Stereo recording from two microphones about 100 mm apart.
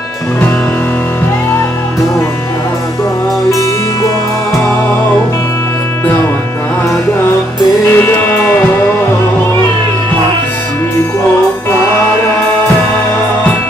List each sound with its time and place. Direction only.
7.9 s music: 20° left (ahead or behind)